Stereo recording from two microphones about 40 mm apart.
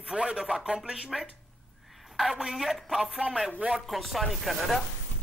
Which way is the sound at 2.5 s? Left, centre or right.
Centre.